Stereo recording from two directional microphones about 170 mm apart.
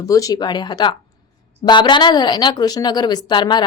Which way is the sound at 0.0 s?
20° left (ahead or behind).